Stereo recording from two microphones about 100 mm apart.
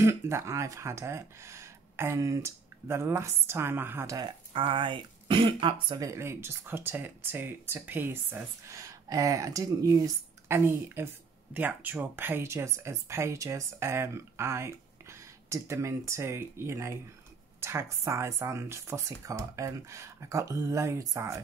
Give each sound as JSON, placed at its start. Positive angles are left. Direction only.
{"t": 0.0, "sound": "speech", "side_deg": -30}
{"t": 4.2, "sound": "speech", "side_deg": -55}
{"t": 5.9, "sound": "speech", "side_deg": -30}
{"t": 8.6, "sound": "speech", "side_deg": -35}